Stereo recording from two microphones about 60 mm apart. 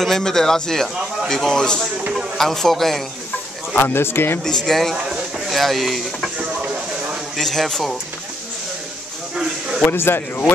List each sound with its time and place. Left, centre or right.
0.0 s a man's voice: centre
3.7 s speech: left
4.5 s speech: centre
6.3 s a sound: centre
7.3 s speech: centre
9.3 s a sound: centre
9.8 s speech: left